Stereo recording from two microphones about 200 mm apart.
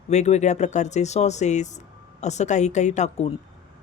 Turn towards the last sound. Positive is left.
turn(degrees=35)  # may be behind; listen again after turning